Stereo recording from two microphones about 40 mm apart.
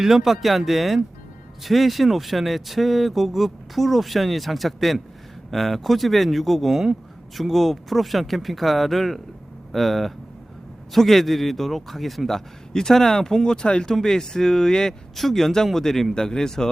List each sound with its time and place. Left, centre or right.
0.0 s speech: centre
15.1 s speech: centre